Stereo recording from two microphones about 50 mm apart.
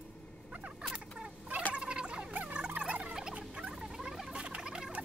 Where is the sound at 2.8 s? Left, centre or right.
Right.